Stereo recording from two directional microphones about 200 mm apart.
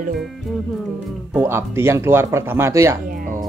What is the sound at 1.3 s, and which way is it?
Speech, 10° right (ahead or behind).